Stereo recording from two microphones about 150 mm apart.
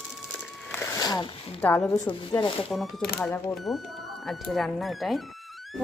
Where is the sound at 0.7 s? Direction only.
15° left (ahead or behind).